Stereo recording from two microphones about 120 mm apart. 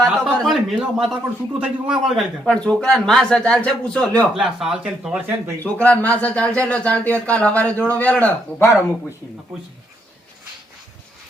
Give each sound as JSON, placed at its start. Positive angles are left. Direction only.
{"t": 0.0, "sound": "a sound", "side_deg": 5}
{"t": 1.5, "sound": "a man's voice", "side_deg": -10}
{"t": 2.5, "sound": "speech", "side_deg": 10}
{"t": 4.4, "sound": "a man's voice", "side_deg": -5}
{"t": 5.6, "sound": "speech", "side_deg": 10}